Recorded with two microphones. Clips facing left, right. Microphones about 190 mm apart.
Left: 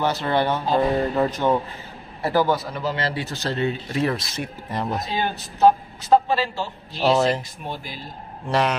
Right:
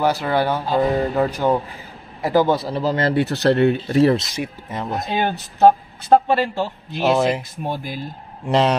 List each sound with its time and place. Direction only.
0.0 s speech: 10° right (ahead or behind)
2.2 s speech: 20° right (ahead or behind); by 3.7 s 65° right (ahead or behind)
3.9 s speech: 35° right (ahead or behind)
4.4 s speech: 5° right (ahead or behind)
5.1 s speech: 60° right (ahead or behind)
7.1 s speech: 10° right (ahead or behind)
7.6 s speech: 50° right (ahead or behind)
8.5 s a man's voice: 25° right (ahead or behind)